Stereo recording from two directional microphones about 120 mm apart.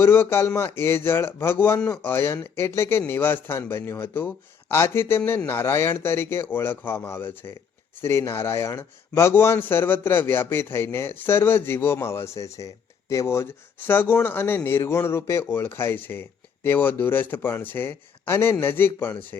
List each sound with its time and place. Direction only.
0.0 s speech: 20° left (ahead or behind)
1.8 s speech: 10° left (ahead or behind)
2.1 s speech: 20° left (ahead or behind)